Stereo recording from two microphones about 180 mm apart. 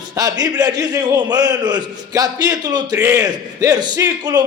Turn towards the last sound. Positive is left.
turn(degrees=-20)  # may be behind; listen again after turning